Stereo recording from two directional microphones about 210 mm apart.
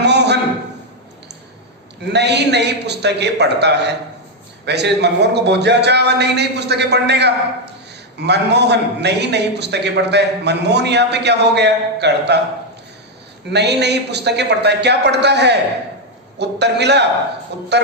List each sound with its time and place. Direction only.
0.0 s a sound: 55° right (ahead or behind)
2.1 s a man's voice: 55° right (ahead or behind)
13.5 s a man's voice: 55° right (ahead or behind)